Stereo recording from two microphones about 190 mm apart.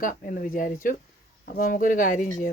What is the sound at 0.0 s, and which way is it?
A woman's voice, 45° left (ahead or behind).